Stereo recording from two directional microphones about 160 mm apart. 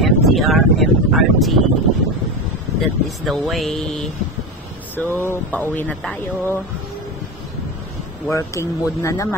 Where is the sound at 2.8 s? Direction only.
Centre (ahead or behind).